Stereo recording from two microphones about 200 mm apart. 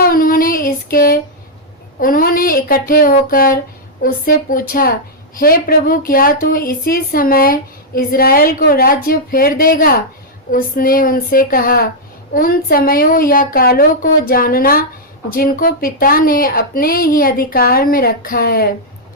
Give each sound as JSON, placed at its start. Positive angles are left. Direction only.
{"t": 0.0, "sound": "child singing", "side_deg": 45}
{"t": 2.0, "sound": "a woman's voice", "side_deg": 45}